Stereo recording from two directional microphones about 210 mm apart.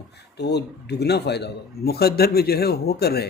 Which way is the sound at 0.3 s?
50° left (ahead or behind).